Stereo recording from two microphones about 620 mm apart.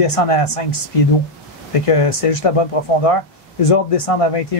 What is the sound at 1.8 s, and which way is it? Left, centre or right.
Speech, left.